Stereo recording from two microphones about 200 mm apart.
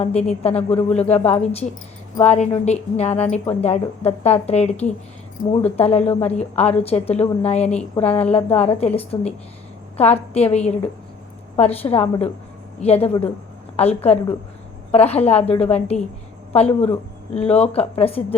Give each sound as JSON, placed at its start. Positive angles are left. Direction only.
{"t": 0.2, "sound": "a woman's voice", "side_deg": 30}
{"t": 5.7, "sound": "a woman's voice", "side_deg": 30}